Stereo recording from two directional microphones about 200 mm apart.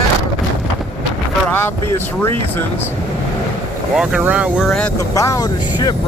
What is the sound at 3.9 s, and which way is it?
Speech, 5° right (ahead or behind).